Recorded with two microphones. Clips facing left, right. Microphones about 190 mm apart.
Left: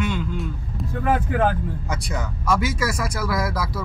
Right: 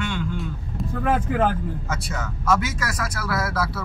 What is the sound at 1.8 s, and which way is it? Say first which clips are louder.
Speech: left 1 dB; 15° left (ahead or behind).